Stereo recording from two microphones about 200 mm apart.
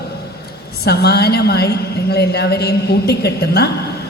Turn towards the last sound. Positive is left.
turn(degrees=55)  # may be behind; listen again after turning